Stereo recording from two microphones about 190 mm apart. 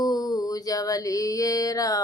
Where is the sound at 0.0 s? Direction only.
20° left (ahead or behind).